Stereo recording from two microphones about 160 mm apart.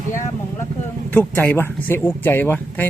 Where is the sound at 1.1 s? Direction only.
10° left (ahead or behind).